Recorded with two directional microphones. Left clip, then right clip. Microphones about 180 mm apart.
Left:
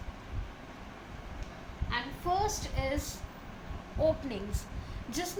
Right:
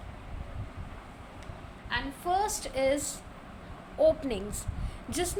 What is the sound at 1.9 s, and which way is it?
A woman's voice, 60° right (ahead or behind).